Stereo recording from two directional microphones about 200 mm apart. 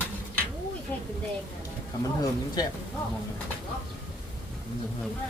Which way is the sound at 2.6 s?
20° left (ahead or behind).